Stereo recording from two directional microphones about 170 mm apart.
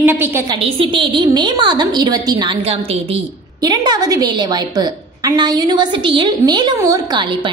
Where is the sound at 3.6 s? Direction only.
25° right (ahead or behind).